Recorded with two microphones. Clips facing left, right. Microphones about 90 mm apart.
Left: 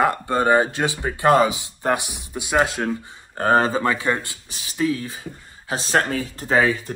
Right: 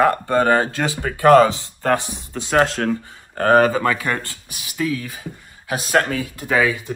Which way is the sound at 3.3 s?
20° left (ahead or behind).